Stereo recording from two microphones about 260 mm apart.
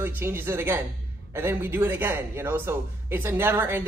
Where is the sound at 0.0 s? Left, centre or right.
Centre.